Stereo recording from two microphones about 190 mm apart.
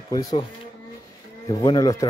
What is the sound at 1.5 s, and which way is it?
Speech, 20° left (ahead or behind).